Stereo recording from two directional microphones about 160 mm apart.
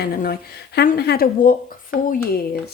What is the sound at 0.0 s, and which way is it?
Speech, 70° left (ahead or behind).